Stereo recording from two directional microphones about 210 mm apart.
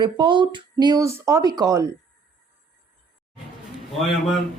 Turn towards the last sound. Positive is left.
turn(degrees=0)  # may be behind; listen again after turning